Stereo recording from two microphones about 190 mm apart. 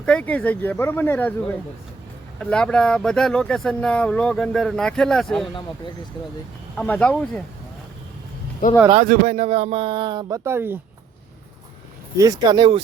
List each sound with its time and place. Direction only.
0.0 s speech: 5° left (ahead or behind)
6.7 s speech: 5° left (ahead or behind)
8.6 s speech: 45° left (ahead or behind)
9.0 s speech: 35° right (ahead or behind); by 10.8 s 10° right (ahead or behind)
12.1 s speech: 15° right (ahead or behind)